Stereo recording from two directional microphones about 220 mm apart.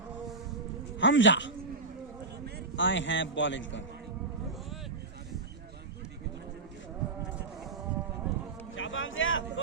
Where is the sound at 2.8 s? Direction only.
55° left (ahead or behind).